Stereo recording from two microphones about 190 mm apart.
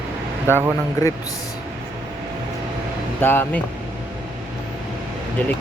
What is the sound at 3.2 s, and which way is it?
Speech, 10° left (ahead or behind).